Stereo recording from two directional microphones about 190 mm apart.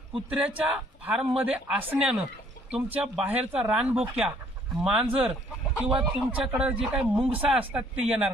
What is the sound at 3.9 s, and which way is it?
Speech, 30° right (ahead or behind).